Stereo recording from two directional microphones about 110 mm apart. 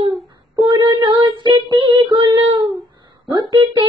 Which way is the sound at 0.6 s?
45° right (ahead or behind).